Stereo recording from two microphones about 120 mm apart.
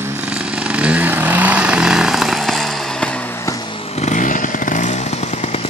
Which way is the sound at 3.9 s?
70° left (ahead or behind).